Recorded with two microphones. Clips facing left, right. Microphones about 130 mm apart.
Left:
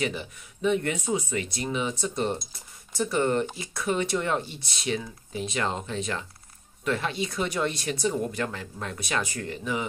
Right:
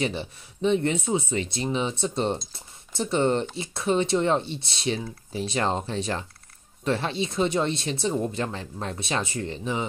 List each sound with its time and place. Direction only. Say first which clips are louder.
0.0 s speech: right 2 dB; 30° right (ahead or behind)